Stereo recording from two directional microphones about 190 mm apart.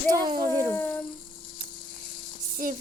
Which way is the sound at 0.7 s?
10° left (ahead or behind).